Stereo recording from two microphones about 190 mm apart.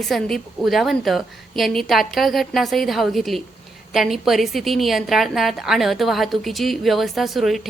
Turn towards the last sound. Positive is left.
turn(degrees=0)  # may be behind; listen again after turning